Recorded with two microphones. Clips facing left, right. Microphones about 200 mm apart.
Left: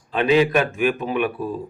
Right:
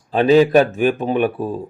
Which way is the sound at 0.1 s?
35° right (ahead or behind).